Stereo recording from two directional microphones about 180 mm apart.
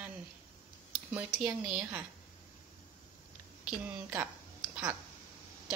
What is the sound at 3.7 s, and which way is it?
Speech, 10° right (ahead or behind).